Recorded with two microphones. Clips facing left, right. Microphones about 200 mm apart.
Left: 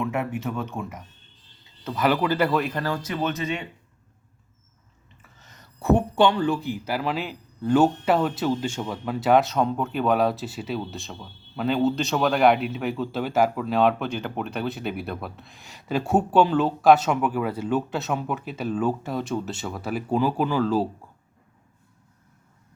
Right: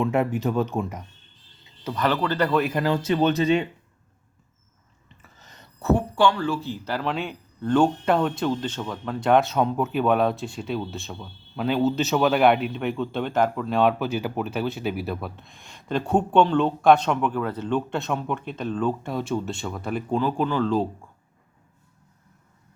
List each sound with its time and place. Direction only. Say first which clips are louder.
0.0 s speech: right 4 dB; 35° right (ahead or behind)
2.0 s speech: left 1 dB; 10° left (ahead or behind)
2.6 s speech: right 3 dB; 5° right (ahead or behind)
2.8 s speech: right 6 dB; 25° right (ahead or behind)
5.8 s a man's voice: left 1 dB; 20° left (ahead or behind)